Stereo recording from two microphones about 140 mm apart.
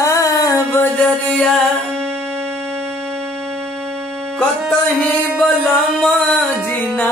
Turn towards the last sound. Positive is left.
turn(degrees=0)  # may be behind; listen again after turning